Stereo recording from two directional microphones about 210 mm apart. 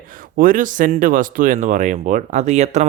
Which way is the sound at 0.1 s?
40° right (ahead or behind).